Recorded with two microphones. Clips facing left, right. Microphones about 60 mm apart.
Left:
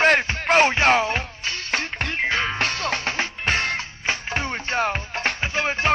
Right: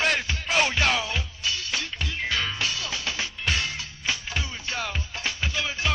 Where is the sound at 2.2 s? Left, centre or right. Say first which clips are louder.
Left 4 dB; left.